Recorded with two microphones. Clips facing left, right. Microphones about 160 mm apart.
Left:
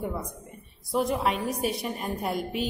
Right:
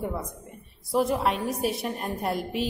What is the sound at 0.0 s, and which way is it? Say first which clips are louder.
A woman's voice: right 1 dB; centre (ahead or behind).